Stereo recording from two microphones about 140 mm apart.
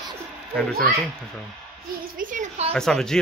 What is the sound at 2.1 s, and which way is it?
Speech, 70° right (ahead or behind).